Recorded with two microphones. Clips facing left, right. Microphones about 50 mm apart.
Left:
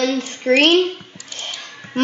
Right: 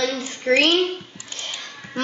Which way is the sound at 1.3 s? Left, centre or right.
Left.